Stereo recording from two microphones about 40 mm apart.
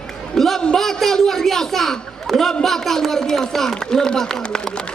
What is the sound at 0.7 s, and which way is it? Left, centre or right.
A man's voice, centre.